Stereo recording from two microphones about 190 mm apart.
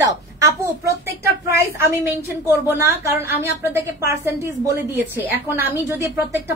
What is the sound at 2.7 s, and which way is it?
A woman's voice, 10° right (ahead or behind).